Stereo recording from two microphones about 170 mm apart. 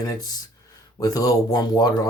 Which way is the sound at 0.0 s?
20° left (ahead or behind).